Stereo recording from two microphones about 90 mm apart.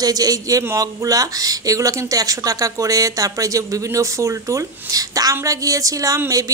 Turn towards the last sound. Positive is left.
turn(degrees=-35)  # may be behind; listen again after turning